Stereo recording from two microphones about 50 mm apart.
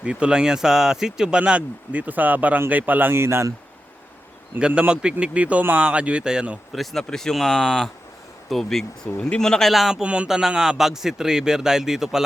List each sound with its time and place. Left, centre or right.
0.0 s speech: centre
1.4 s speech: right
3.1 s a man's voice: right
4.6 s speech: right
6.7 s speech: centre
9.1 s speech: left
9.4 s speech: centre
9.9 s speech: right
10.2 s speech: centre